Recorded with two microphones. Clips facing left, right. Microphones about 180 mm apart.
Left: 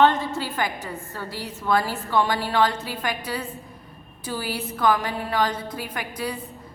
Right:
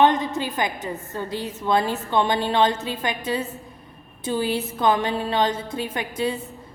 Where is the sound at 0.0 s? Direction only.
15° right (ahead or behind).